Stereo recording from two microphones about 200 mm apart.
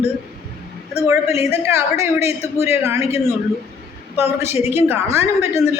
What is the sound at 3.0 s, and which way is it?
Speech, 30° left (ahead or behind).